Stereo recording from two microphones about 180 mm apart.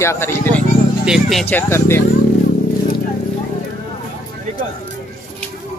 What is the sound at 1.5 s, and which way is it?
Speech, 10° left (ahead or behind).